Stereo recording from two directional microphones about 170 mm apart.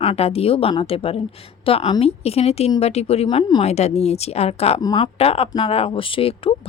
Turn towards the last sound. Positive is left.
turn(degrees=35)  # may be behind; listen again after turning